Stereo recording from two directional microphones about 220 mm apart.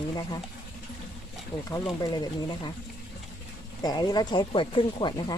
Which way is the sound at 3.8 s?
15° left (ahead or behind).